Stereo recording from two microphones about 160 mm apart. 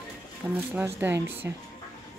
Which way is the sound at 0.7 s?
15° right (ahead or behind).